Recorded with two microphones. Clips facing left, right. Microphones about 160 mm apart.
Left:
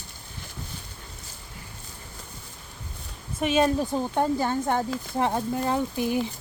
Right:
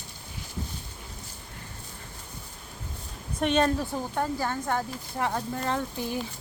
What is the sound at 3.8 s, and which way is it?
Speech, 20° left (ahead or behind).